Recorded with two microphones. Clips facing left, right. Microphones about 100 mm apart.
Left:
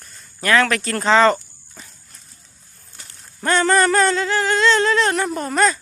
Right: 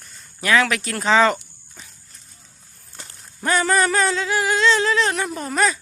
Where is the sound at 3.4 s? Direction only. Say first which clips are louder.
Left 3 dB; 5° right (ahead or behind).